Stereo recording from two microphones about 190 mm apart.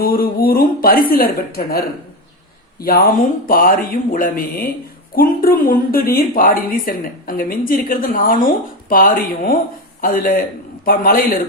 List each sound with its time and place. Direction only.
0.0 s a woman's voice: 50° left (ahead or behind)
2.8 s a woman's voice: 50° left (ahead or behind)